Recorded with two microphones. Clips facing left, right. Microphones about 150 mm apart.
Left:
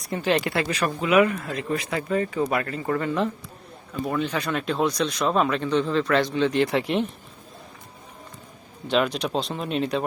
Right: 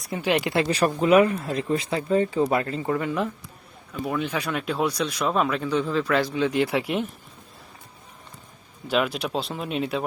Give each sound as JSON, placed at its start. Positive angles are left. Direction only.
{"t": 0.2, "sound": "speech", "side_deg": -15}
{"t": 2.8, "sound": "speech", "side_deg": -10}
{"t": 8.9, "sound": "speech", "side_deg": -5}